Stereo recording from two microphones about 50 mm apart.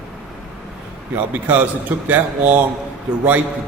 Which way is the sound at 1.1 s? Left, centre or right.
Right.